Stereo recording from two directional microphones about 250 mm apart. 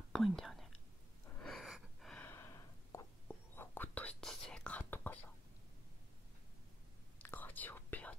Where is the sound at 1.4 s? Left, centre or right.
Centre.